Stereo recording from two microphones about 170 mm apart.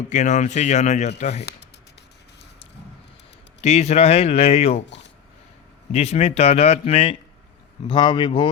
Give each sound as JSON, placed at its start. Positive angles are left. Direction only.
{"t": 0.1, "sound": "a man's voice", "side_deg": 45}
{"t": 3.6, "sound": "a man's voice", "side_deg": 40}
{"t": 5.9, "sound": "a man's voice", "side_deg": 40}